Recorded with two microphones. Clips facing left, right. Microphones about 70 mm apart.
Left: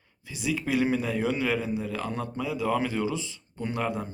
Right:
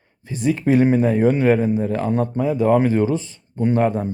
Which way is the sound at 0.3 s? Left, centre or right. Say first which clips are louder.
Right 10 dB; right.